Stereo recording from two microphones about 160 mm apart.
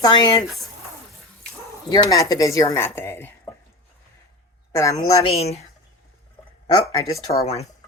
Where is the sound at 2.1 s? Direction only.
20° left (ahead or behind).